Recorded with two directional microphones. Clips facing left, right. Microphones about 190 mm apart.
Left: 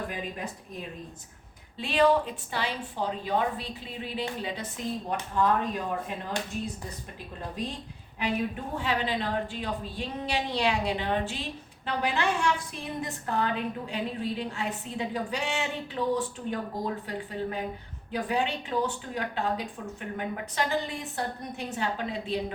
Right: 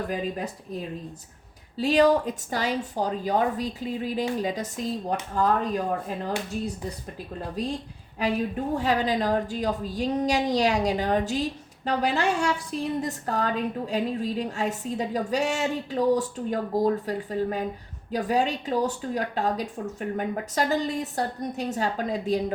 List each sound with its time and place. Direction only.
1.8 s a woman's voice: 40° right (ahead or behind)
8.2 s a woman's voice: 40° right (ahead or behind)